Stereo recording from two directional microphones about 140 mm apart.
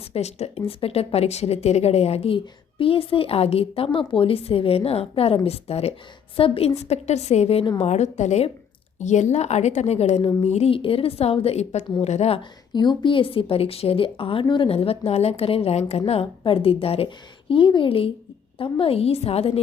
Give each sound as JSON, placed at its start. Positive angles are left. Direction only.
{"t": 0.1, "sound": "a woman's voice", "side_deg": 50}
{"t": 12.4, "sound": "a woman's voice", "side_deg": 30}